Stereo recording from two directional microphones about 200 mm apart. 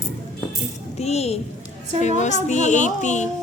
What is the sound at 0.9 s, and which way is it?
A woman's voice, 30° left (ahead or behind).